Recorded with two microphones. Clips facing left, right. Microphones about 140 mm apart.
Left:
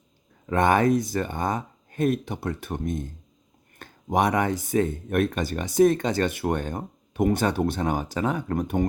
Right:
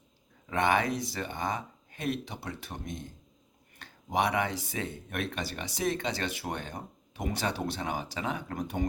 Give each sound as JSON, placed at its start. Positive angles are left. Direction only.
{"t": 0.4, "sound": "speech", "side_deg": 45}